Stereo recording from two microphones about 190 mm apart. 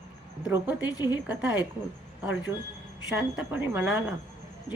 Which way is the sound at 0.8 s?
20° left (ahead or behind).